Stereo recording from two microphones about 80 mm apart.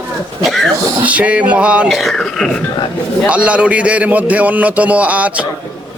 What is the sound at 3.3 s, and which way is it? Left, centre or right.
A man's voice, centre.